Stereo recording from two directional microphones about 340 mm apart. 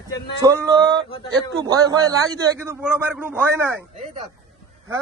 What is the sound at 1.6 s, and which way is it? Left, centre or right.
A man's voice, centre.